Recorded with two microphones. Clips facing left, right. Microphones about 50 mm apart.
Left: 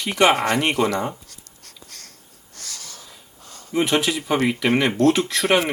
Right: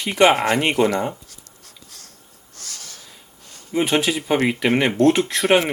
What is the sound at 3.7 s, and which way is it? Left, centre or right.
Speech, centre.